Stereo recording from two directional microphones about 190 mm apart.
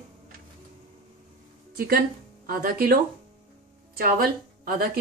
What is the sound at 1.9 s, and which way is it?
A woman's voice, 50° right (ahead or behind).